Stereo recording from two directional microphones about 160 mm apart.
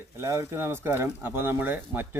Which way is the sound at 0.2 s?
15° right (ahead or behind).